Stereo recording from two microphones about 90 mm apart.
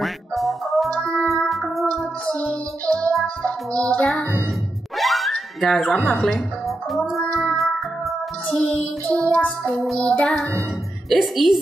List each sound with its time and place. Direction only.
0.0 s music: centre (ahead or behind)
5.9 s music: 10° left (ahead or behind)
6.9 s child singing: centre (ahead or behind)
8.5 s music: 10° left (ahead or behind)
9.8 s a woman's voice: centre (ahead or behind)
10.0 s music: 10° left (ahead or behind)
11.1 s a woman's voice: centre (ahead or behind)